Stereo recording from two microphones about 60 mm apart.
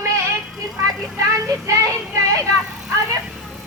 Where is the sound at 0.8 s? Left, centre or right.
Right.